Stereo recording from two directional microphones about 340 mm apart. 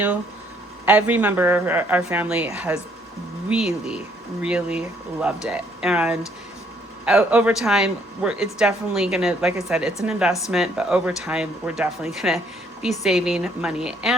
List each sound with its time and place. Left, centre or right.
0.9 s speech: centre